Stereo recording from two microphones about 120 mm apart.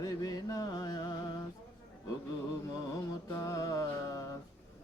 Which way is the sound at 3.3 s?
30° left (ahead or behind).